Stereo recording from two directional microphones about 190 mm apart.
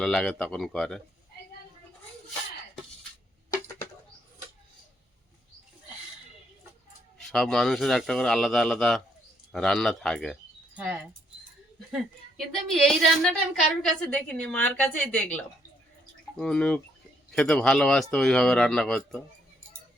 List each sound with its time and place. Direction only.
0.0 s speech: 5° left (ahead or behind)
7.2 s a woman's voice: centre (ahead or behind)
16.4 s speech: 5° left (ahead or behind)